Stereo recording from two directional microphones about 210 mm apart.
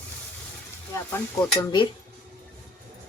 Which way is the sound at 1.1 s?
20° left (ahead or behind).